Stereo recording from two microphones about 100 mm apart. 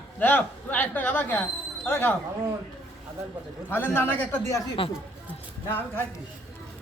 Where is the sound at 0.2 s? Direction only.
20° left (ahead or behind).